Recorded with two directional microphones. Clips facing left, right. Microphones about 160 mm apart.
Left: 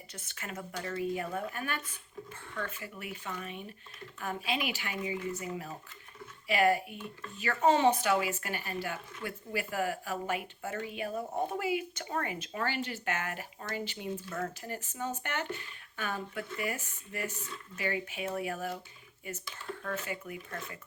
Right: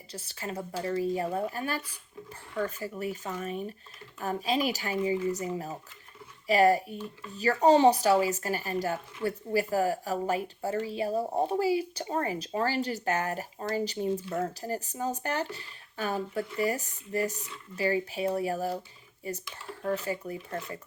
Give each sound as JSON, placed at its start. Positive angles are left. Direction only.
{"t": 0.1, "sound": "speech", "side_deg": -30}